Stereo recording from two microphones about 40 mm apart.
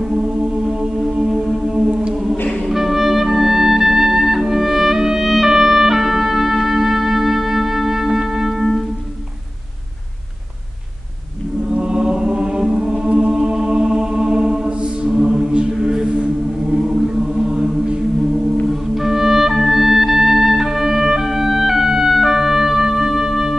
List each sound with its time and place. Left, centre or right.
1.2 s music: centre
11.7 s chant: centre
16.7 s choir: centre
18.7 s music: centre